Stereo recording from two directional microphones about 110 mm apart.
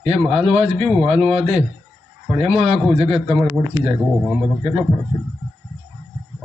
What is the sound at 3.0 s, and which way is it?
Speech, 60° right (ahead or behind).